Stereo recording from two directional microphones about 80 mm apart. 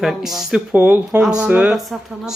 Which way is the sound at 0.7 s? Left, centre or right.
Right.